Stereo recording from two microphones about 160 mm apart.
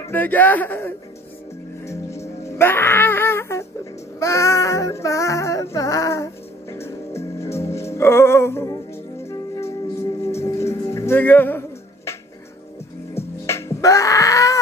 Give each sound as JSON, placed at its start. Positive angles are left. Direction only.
{"t": 0.0, "sound": "speech", "side_deg": 10}
{"t": 1.9, "sound": "music", "side_deg": 20}
{"t": 2.5, "sound": "wail", "side_deg": 15}
{"t": 4.2, "sound": "child singing", "side_deg": 20}
{"t": 10.4, "sound": "music", "side_deg": 20}
{"t": 13.5, "sound": "wail", "side_deg": 15}